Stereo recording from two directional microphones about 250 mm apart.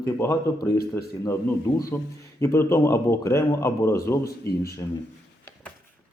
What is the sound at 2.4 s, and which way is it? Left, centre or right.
A man's voice, centre.